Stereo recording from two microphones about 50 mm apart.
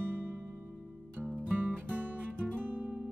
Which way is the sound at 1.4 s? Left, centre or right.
Right.